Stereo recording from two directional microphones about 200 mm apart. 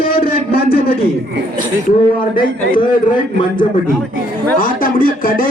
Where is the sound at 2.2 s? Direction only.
45° left (ahead or behind).